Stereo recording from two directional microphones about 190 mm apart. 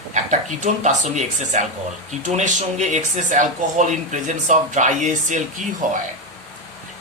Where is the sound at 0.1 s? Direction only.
40° right (ahead or behind).